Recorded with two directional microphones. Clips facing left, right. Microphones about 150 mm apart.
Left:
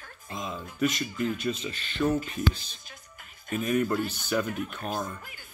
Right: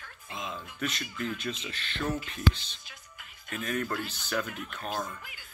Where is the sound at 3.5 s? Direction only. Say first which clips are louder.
Left 6 dB; 10° left (ahead or behind).